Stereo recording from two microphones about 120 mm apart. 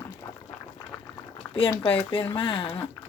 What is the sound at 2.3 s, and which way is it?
Speech, 45° left (ahead or behind).